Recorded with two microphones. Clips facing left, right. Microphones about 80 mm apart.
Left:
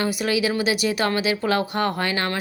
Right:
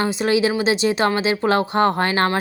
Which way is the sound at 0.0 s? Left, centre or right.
Right.